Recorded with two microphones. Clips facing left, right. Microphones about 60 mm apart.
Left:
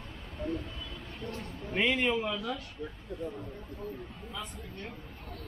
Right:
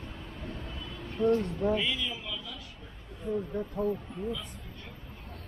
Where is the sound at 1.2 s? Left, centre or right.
Right.